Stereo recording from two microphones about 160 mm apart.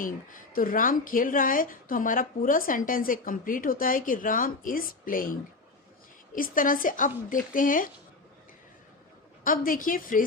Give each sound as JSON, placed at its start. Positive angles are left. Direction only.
{"t": 0.0, "sound": "speech", "side_deg": 60}
{"t": 9.4, "sound": "speech", "side_deg": 60}